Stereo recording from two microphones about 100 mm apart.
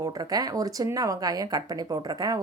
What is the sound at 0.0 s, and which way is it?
Speech, 40° right (ahead or behind).